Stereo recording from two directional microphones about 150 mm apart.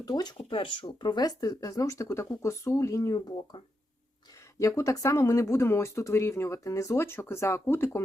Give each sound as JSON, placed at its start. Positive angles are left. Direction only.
{"t": 0.0, "sound": "speech", "side_deg": 25}
{"t": 4.6, "sound": "speech", "side_deg": 20}